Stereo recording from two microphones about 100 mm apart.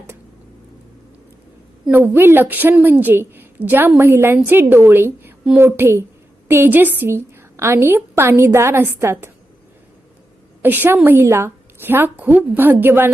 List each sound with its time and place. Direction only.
1.9 s a woman's voice: 20° right (ahead or behind)
10.6 s a woman's voice: 20° right (ahead or behind)